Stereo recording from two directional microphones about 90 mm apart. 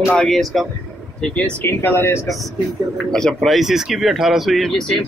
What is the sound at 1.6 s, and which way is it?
Speech, 25° left (ahead or behind).